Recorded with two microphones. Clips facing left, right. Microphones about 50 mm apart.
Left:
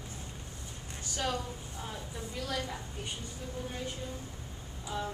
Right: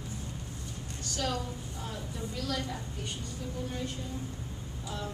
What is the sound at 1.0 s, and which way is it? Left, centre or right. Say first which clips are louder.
A woman's voice: right 1 dB; centre.